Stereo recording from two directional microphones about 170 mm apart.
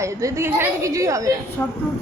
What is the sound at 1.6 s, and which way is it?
Speech, 10° left (ahead or behind).